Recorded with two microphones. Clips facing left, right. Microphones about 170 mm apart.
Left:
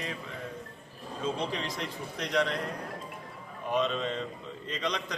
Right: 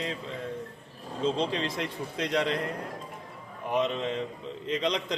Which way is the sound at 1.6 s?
60° right (ahead or behind).